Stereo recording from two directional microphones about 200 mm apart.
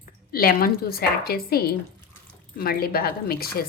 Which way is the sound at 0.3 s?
50° left (ahead or behind).